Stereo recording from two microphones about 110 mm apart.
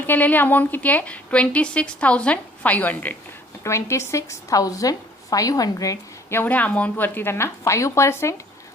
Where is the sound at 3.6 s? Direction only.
25° left (ahead or behind).